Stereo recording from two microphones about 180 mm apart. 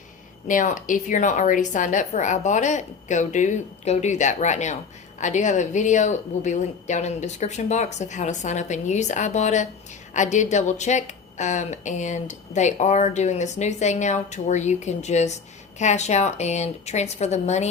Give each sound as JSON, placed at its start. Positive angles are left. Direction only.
{"t": 0.4, "sound": "a woman's voice", "side_deg": 45}